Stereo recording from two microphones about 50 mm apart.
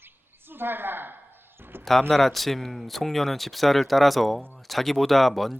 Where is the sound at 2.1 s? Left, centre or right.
Centre.